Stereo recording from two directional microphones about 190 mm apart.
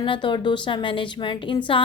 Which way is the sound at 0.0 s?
25° left (ahead or behind).